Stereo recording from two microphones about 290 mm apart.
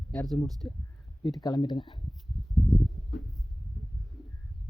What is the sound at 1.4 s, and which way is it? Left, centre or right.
Speech, centre.